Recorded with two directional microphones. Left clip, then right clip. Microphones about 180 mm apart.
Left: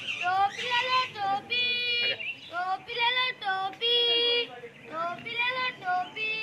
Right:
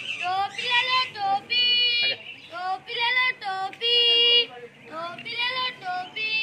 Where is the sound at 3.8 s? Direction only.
15° right (ahead or behind).